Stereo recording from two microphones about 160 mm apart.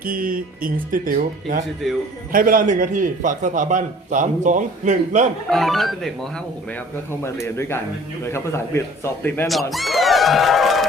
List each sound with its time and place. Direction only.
0.0 s speech: 65° right (ahead or behind)
1.8 s speech: centre (ahead or behind)
2.3 s a man's voice: 60° right (ahead or behind)
5.5 s a man's voice: centre (ahead or behind)
9.7 s speech: centre (ahead or behind)